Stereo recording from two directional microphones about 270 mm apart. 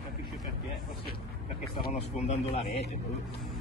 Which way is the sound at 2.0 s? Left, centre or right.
Left.